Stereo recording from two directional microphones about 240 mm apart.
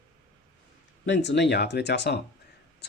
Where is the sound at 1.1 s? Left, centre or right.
Left.